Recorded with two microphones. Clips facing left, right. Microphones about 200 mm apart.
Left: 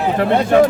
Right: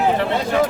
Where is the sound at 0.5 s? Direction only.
55° left (ahead or behind).